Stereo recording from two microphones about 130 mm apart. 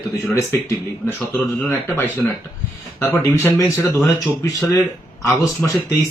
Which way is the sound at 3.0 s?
20° left (ahead or behind).